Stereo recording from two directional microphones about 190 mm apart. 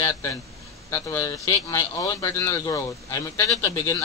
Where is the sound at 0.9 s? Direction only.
15° left (ahead or behind).